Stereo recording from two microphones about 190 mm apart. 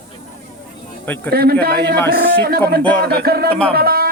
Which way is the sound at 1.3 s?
55° right (ahead or behind).